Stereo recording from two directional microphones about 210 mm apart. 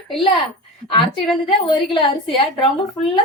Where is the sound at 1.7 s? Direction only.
20° left (ahead or behind).